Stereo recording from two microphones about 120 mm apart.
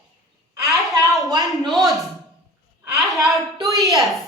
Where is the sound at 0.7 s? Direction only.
25° right (ahead or behind).